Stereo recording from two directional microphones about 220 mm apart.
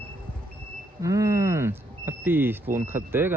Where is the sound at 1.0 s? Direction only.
15° right (ahead or behind).